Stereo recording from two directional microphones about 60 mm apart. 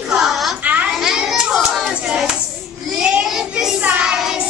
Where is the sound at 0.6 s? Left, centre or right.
Right.